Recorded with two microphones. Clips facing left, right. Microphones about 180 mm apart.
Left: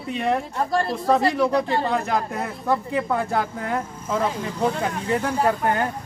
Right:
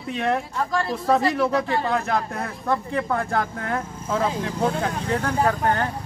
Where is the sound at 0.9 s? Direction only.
Centre (ahead or behind).